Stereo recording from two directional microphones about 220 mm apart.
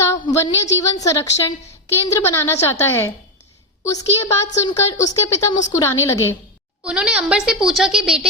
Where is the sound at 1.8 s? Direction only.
10° left (ahead or behind).